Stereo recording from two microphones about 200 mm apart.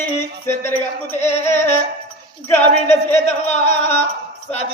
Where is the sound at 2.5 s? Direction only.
10° left (ahead or behind).